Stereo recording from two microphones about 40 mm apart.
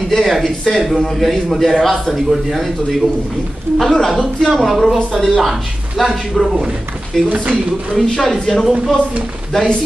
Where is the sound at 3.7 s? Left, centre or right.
Right.